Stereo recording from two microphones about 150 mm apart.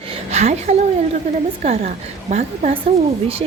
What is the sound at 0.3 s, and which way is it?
A woman's voice, 45° right (ahead or behind).